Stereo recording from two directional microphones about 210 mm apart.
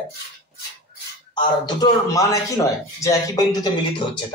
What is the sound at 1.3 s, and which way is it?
A man's voice, 20° left (ahead or behind).